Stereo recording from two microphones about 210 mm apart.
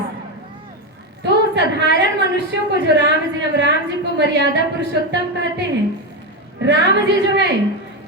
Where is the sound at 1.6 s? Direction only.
55° right (ahead or behind).